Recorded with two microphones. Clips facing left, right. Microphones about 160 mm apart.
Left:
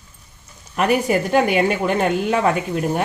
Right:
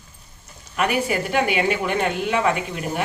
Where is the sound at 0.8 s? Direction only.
35° left (ahead or behind).